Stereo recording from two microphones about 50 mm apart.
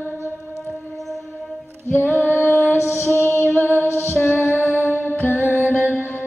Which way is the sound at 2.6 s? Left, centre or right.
Right.